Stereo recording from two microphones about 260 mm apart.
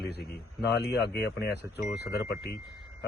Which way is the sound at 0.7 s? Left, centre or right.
Left.